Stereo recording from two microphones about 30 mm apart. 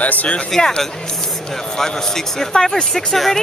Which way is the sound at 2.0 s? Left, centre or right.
Centre.